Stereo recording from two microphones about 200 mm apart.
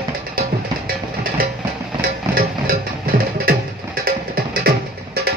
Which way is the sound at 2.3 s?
45° right (ahead or behind).